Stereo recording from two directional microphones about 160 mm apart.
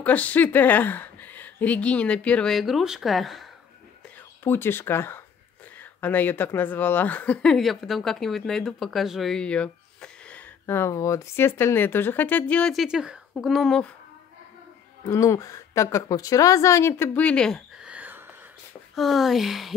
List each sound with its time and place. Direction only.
0.0 s a woman's voice: 10° left (ahead or behind)
4.5 s a woman's voice: 15° left (ahead or behind)
15.0 s a woman's voice: 20° left (ahead or behind)
17.8 s a sound: 10° right (ahead or behind)
18.9 s speech: centre (ahead or behind)